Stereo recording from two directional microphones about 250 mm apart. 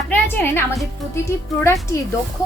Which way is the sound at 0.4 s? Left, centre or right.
Centre.